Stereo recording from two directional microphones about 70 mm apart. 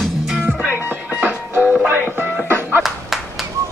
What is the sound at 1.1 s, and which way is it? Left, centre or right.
Music, right.